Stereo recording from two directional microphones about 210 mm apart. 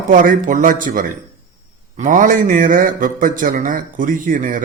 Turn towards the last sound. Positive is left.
turn(degrees=-40)  # may be behind; listen again after turning